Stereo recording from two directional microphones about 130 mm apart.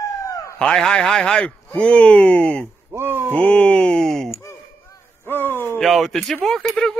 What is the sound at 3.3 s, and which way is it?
Speech, 10° left (ahead or behind).